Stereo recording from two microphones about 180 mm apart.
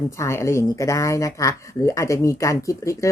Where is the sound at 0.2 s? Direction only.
15° left (ahead or behind).